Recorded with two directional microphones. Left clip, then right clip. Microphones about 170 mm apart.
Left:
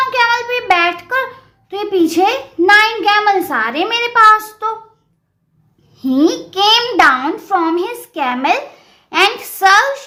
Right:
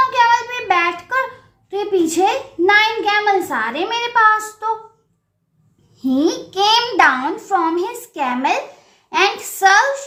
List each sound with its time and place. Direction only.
0.1 s child singing: 30° left (ahead or behind)
1.7 s a sound: 30° left (ahead or behind)
6.0 s a child's voice: 25° left (ahead or behind)